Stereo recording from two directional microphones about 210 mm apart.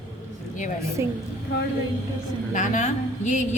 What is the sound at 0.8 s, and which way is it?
Speech, 15° right (ahead or behind).